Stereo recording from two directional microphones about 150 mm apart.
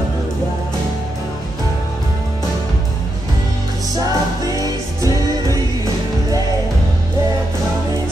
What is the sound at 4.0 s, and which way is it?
Music, 25° right (ahead or behind).